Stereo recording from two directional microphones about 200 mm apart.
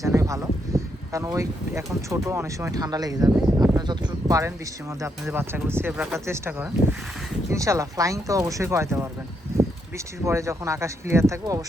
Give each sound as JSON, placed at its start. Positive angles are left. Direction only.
{"t": 0.0, "sound": "speech", "side_deg": -15}
{"t": 10.2, "sound": "speech", "side_deg": -15}